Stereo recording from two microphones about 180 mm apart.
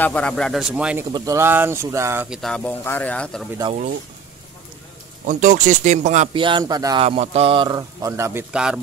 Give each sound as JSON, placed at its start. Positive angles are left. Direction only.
{"t": 0.0, "sound": "a man's voice", "side_deg": 10}
{"t": 1.1, "sound": "speech", "side_deg": -15}
{"t": 2.2, "sound": "speech", "side_deg": 0}
{"t": 5.2, "sound": "speech", "side_deg": -45}
{"t": 6.3, "sound": "speech", "side_deg": -25}
{"t": 7.1, "sound": "speech", "side_deg": -35}